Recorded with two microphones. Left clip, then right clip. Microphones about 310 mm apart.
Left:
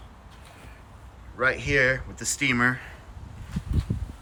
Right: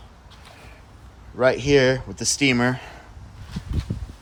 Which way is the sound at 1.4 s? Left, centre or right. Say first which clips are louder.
Right 5 dB; centre.